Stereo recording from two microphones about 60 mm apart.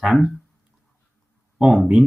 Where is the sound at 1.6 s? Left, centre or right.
Centre.